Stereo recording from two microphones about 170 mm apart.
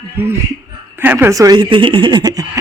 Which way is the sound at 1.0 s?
10° right (ahead or behind).